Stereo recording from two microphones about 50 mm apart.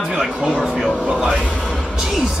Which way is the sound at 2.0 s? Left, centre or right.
Centre.